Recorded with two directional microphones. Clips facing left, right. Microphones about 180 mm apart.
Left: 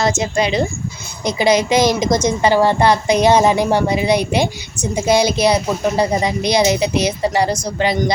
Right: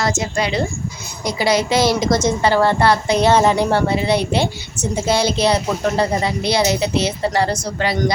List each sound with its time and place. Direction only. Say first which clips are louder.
0.0 s a woman's voice: left 3 dB; 20° left (ahead or behind)